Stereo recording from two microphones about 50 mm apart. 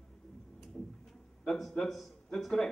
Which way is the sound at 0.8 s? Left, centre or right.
Centre.